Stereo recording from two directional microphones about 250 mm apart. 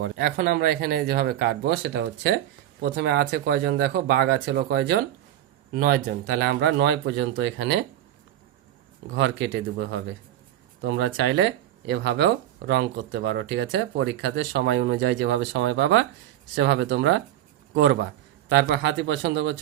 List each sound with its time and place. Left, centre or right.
0.0 s speech: right
9.0 s speech: right
18.5 s speech: right